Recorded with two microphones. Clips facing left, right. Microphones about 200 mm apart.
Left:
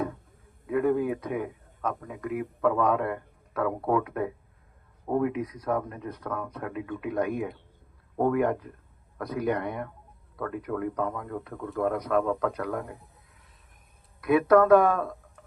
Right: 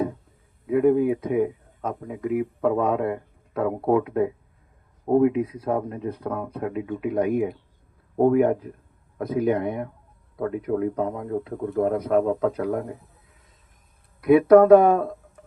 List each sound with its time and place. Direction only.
0.7 s speech: 20° right (ahead or behind)
14.3 s speech: 30° right (ahead or behind)